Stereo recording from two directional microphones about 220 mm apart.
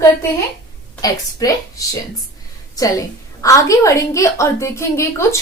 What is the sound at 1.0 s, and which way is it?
A woman's voice, 15° left (ahead or behind).